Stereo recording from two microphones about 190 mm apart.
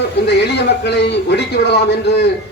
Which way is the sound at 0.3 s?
60° left (ahead or behind).